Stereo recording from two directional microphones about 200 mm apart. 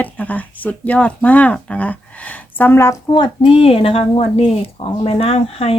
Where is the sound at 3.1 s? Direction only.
25° left (ahead or behind).